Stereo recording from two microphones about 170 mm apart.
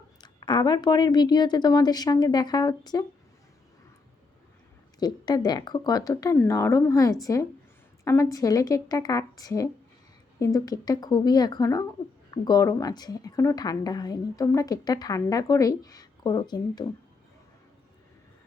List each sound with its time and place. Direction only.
0.2 s a woman's voice: 25° left (ahead or behind)
4.9 s a woman's voice: 25° left (ahead or behind)